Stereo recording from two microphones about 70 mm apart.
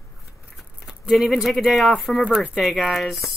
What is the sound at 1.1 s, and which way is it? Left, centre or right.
Speech, centre.